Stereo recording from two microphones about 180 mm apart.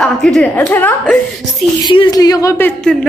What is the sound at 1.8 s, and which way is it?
Speech, 25° left (ahead or behind).